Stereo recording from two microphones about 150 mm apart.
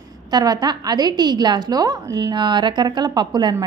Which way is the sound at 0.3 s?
25° right (ahead or behind).